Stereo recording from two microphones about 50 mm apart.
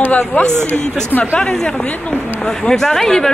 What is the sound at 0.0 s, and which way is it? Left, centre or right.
Speech, left.